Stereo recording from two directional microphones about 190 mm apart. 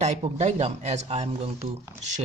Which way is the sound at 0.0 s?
35° right (ahead or behind).